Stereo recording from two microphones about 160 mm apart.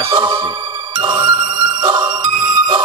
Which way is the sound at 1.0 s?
30° right (ahead or behind).